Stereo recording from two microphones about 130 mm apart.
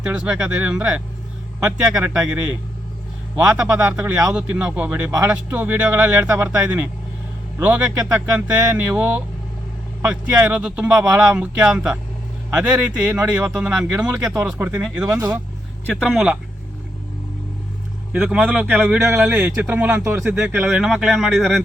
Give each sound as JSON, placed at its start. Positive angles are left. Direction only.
{"t": 0.1, "sound": "speech", "side_deg": -5}
{"t": 3.3, "sound": "speech", "side_deg": -10}
{"t": 15.0, "sound": "speech", "side_deg": -25}
{"t": 15.9, "sound": "speech", "side_deg": 0}
{"t": 18.1, "sound": "speech", "side_deg": -10}
{"t": 20.7, "sound": "speech", "side_deg": -5}